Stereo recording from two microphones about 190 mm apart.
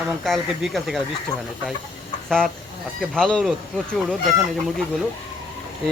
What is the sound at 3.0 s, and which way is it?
Speech, 5° left (ahead or behind).